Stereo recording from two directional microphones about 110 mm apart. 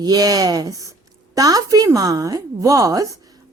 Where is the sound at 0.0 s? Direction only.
35° right (ahead or behind).